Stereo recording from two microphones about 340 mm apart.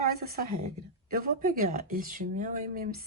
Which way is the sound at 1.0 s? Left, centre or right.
Right.